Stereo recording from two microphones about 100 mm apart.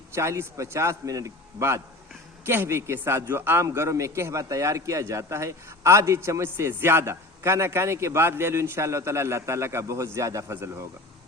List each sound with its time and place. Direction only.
0.1 s a man's voice: 25° right (ahead or behind)